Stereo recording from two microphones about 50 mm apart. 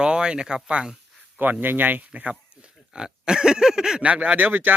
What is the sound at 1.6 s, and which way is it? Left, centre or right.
Speech, right.